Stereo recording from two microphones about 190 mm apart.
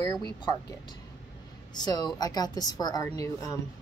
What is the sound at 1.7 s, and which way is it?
Speech, 20° left (ahead or behind).